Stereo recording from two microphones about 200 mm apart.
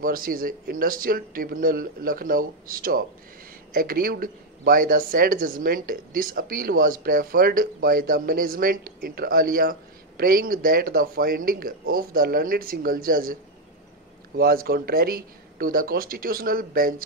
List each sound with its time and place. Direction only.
0.0 s speech: 45° right (ahead or behind)